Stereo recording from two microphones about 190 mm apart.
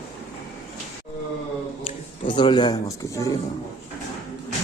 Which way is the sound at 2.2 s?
25° left (ahead or behind).